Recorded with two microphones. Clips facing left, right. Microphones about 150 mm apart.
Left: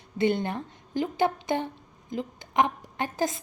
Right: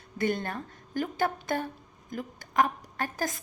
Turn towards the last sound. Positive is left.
turn(degrees=20)  # may be behind; listen again after turning